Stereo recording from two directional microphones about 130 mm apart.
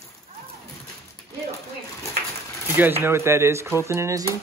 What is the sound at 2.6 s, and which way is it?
Speech, 15° right (ahead or behind).